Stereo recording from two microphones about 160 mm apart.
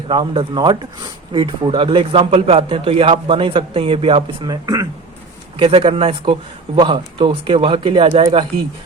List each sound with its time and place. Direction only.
0.1 s a man's voice: 30° right (ahead or behind)
5.5 s a man's voice: 35° right (ahead or behind)